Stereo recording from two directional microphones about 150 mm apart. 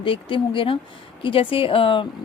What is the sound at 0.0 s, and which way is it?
Speech, 35° left (ahead or behind).